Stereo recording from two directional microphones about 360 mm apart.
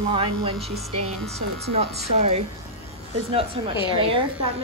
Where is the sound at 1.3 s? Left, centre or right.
Centre.